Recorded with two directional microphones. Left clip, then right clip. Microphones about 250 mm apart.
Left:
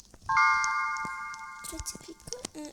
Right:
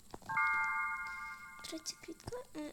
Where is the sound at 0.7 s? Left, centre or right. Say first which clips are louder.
Left 7 dB; centre.